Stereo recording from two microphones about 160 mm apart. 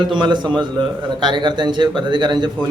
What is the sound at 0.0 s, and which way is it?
A man's voice, 30° right (ahead or behind).